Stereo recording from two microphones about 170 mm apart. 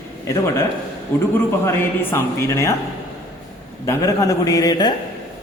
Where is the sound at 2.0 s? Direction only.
15° left (ahead or behind).